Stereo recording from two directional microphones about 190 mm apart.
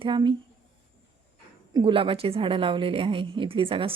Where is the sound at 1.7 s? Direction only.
25° right (ahead or behind).